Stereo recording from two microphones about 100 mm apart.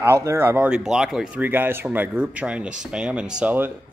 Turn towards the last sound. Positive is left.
turn(degrees=-10)  # may be behind; listen again after turning